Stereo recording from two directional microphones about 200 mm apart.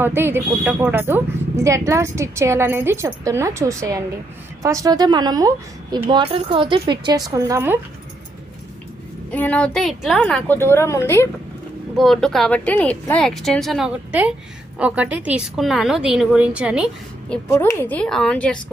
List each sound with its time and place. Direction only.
0.0 s a woman's voice: 10° right (ahead or behind)
9.3 s a woman's voice: 5° left (ahead or behind)
11.9 s a woman's voice: 5° left (ahead or behind)